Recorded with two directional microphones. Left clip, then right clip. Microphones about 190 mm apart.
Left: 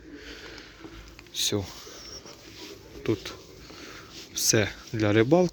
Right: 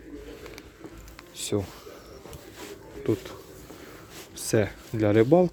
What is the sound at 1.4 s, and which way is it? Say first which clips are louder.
Speech: left 2 dB; 10° right (ahead or behind).